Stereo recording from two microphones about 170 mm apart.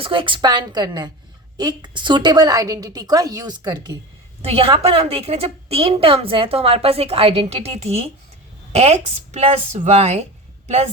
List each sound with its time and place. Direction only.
0.0 s a woman's voice: 30° right (ahead or behind)
4.4 s a woman's voice: 35° right (ahead or behind)